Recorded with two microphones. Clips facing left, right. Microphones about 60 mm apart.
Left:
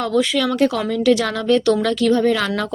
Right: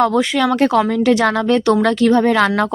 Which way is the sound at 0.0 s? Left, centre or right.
Right.